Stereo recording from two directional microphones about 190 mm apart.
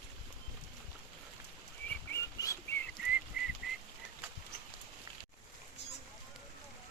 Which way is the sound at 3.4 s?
5° right (ahead or behind).